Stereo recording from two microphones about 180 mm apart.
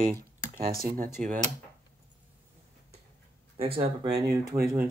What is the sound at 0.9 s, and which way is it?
Speech, 45° right (ahead or behind).